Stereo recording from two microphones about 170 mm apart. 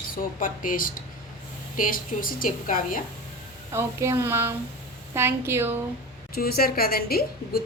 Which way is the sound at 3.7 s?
15° right (ahead or behind).